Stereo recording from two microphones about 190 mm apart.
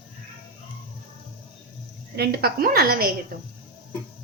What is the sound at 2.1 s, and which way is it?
Speech, 55° right (ahead or behind).